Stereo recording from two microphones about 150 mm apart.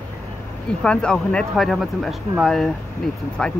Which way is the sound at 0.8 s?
5° left (ahead or behind).